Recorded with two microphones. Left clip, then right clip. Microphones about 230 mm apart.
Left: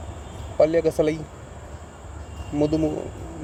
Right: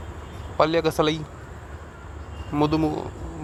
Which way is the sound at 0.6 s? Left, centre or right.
Centre.